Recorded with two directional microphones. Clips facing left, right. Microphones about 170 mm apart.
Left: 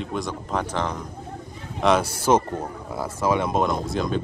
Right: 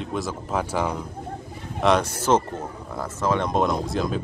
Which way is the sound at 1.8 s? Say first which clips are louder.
Left 1 dB; 5° left (ahead or behind).